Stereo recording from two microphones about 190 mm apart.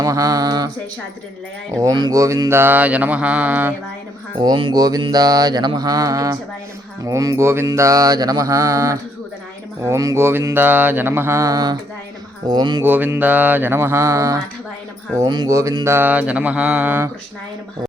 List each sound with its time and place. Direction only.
0.0 s mantra: 20° right (ahead or behind)
1.7 s mantra: 20° right (ahead or behind)
4.4 s mantra: 25° right (ahead or behind)
12.8 s mantra: 10° right (ahead or behind)